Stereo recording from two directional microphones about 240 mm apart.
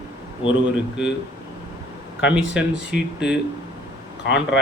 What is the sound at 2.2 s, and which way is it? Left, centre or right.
Speech, centre.